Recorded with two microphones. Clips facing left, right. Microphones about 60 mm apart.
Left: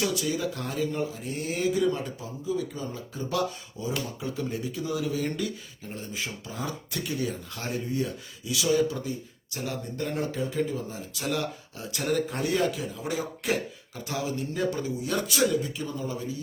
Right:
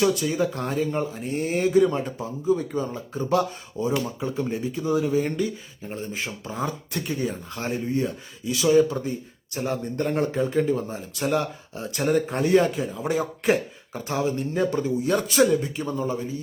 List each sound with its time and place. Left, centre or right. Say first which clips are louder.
0.0 s speech: right 6 dB; right
4.2 s speech: right 5 dB; right